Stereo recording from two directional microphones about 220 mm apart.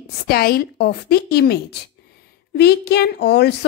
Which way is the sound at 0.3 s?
45° left (ahead or behind).